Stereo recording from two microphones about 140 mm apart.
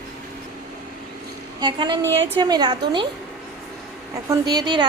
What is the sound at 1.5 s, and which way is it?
A woman's voice, 35° right (ahead or behind).